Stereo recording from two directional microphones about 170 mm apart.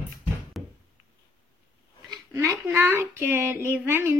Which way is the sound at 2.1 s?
15° right (ahead or behind).